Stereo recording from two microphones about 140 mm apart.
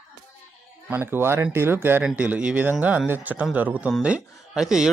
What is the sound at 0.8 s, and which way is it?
Speech, 15° right (ahead or behind).